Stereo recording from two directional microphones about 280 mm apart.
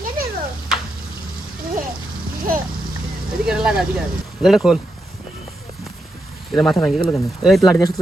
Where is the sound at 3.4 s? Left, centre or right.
Centre.